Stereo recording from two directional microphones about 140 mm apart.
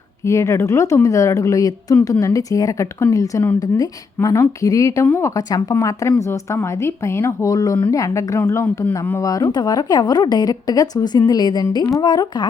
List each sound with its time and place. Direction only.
0.3 s a woman's voice: 20° left (ahead or behind)